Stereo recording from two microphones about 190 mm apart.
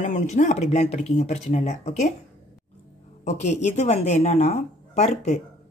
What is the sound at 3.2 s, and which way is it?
Speech, 35° left (ahead or behind).